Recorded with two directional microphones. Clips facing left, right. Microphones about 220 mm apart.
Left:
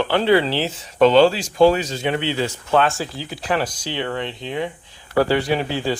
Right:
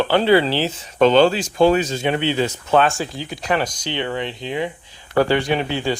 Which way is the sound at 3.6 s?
5° left (ahead or behind).